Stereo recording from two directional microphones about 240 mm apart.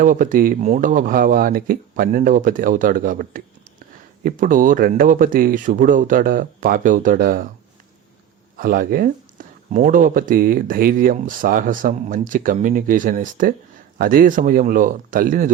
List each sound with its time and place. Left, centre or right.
0.0 s speech: right
8.5 s speech: right